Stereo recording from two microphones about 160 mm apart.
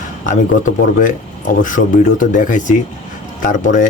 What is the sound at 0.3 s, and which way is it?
Speech, 55° left (ahead or behind).